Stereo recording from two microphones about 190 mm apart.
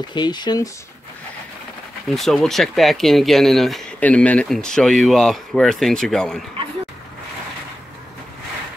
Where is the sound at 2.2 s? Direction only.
Centre (ahead or behind).